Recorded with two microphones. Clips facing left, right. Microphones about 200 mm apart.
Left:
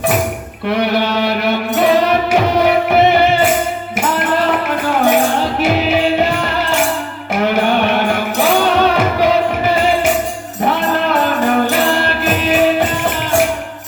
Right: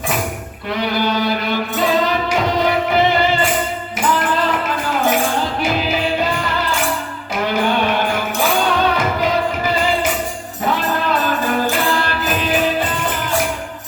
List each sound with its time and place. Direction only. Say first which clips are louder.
0.8 s music: left 2 dB; 65° left (ahead or behind)
11.9 s music: left 4 dB; 65° left (ahead or behind)